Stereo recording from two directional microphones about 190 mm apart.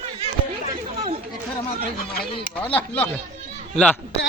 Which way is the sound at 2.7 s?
10° left (ahead or behind).